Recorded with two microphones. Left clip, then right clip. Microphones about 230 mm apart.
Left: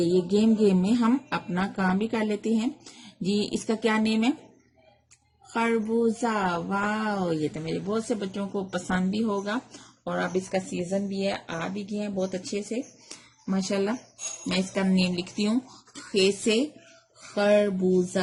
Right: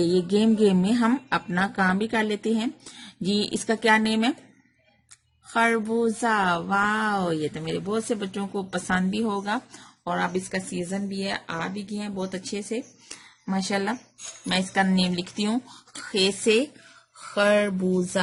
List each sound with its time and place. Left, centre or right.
0.0 s speech: right
5.5 s speech: right
17.3 s speech: right